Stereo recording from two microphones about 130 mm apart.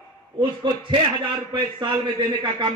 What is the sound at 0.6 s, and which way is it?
A man's voice, 35° right (ahead or behind).